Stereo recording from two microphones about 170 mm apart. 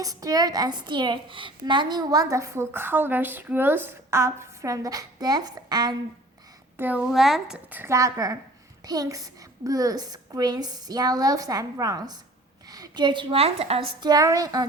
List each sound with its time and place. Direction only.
0.0 s a woman's voice: 20° right (ahead or behind)
6.7 s a woman's voice: 10° right (ahead or behind)